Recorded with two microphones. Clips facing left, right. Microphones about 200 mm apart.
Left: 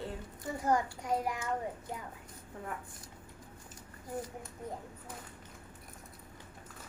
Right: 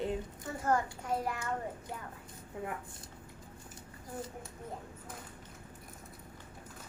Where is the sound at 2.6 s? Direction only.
15° right (ahead or behind).